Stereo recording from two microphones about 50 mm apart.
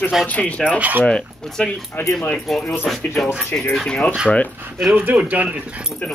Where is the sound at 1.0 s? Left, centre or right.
Centre.